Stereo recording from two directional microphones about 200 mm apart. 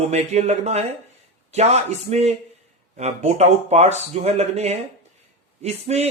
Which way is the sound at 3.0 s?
35° right (ahead or behind).